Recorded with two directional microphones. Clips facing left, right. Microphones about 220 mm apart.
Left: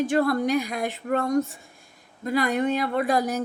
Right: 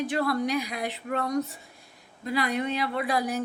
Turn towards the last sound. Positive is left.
turn(degrees=45)  # may be behind; listen again after turning